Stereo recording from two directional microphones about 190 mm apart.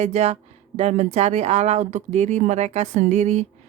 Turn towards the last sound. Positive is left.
turn(degrees=-35)  # may be behind; listen again after turning